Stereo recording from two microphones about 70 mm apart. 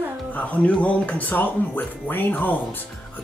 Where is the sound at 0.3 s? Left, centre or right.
Left.